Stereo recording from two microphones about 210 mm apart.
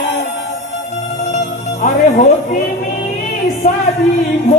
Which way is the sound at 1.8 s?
35° left (ahead or behind).